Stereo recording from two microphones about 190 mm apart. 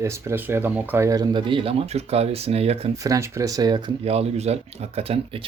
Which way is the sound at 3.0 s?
15° right (ahead or behind).